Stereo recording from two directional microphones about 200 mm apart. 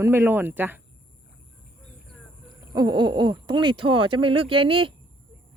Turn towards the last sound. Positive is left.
turn(degrees=-25)  # may be behind; listen again after turning